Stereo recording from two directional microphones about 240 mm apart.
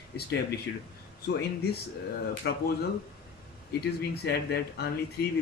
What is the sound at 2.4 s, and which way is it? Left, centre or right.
Speech, left.